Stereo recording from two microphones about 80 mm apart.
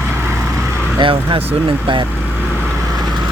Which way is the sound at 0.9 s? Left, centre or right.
Right.